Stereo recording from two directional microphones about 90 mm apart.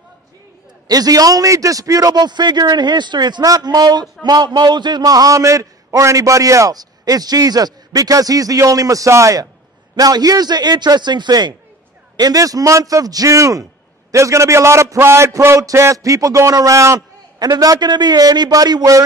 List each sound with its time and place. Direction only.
0.8 s a man's voice: 45° right (ahead or behind)
12.2 s a man's voice: 45° right (ahead or behind)
17.4 s a man's voice: 45° right (ahead or behind)